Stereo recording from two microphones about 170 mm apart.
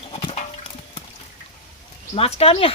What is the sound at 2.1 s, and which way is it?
Speech, 35° left (ahead or behind).